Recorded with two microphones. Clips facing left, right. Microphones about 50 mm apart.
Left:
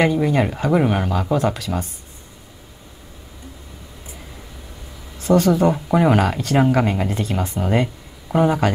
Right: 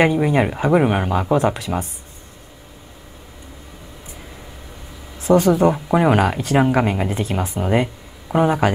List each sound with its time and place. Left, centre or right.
0.0 s speech: centre
5.2 s speech: centre